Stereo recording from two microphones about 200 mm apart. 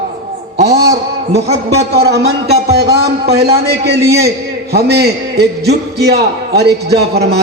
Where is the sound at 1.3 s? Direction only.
30° right (ahead or behind).